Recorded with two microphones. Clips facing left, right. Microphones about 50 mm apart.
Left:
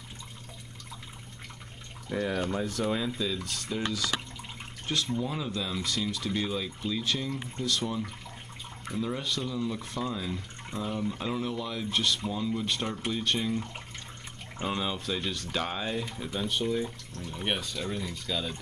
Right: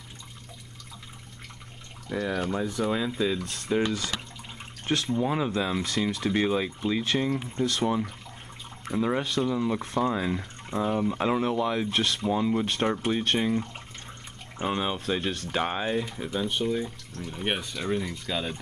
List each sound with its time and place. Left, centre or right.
2.0 s speech: centre
3.4 s speech: right
4.8 s speech: right
14.6 s speech: right
15.5 s speech: right
16.6 s speech: centre
17.6 s speech: centre